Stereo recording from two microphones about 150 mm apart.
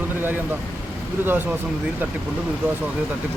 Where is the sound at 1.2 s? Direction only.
15° right (ahead or behind).